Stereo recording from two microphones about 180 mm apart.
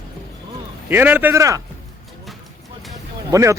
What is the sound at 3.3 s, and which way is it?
Speech, 15° right (ahead or behind).